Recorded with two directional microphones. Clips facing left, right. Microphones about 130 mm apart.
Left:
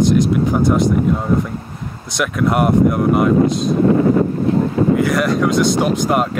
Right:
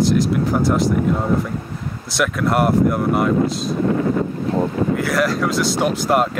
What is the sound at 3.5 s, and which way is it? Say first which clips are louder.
Speech: left 5 dB; 50° left (ahead or behind).